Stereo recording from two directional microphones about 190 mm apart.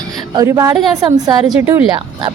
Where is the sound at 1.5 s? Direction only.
10° right (ahead or behind).